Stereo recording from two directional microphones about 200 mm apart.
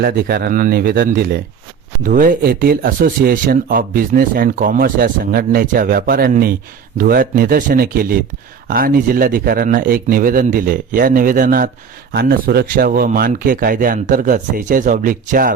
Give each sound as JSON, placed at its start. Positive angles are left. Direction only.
{"t": 0.0, "sound": "speech", "side_deg": -50}